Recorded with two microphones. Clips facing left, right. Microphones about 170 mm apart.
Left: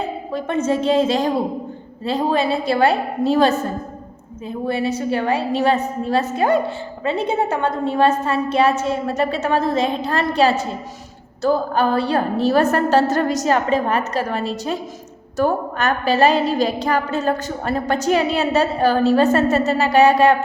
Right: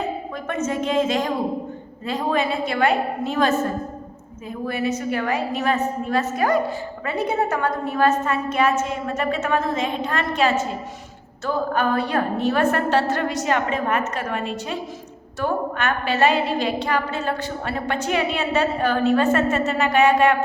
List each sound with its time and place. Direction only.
0.3 s a woman's voice: 30° left (ahead or behind)